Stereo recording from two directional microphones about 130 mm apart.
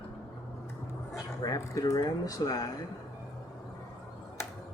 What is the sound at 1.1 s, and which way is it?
Speech, 25° left (ahead or behind).